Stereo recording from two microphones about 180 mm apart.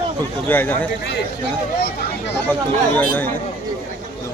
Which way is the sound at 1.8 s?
75° left (ahead or behind).